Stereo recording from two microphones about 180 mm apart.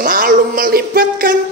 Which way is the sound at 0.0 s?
50° right (ahead or behind).